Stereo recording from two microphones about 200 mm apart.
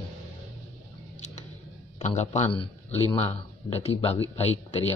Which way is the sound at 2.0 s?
35° left (ahead or behind).